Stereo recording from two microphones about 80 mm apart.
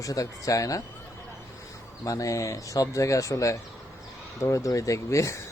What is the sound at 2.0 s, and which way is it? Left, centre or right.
Speech, left.